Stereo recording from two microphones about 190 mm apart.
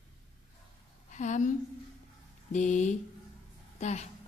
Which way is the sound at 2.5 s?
40° left (ahead or behind).